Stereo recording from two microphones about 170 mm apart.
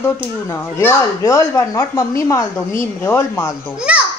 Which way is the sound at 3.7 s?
5° right (ahead or behind).